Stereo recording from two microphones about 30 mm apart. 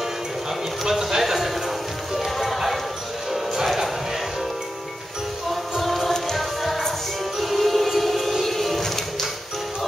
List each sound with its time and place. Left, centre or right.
0.8 s speech: centre
1.2 s a sound: centre
2.1 s music: centre
5.5 s music: centre
6.1 s music: centre
7.3 s music: centre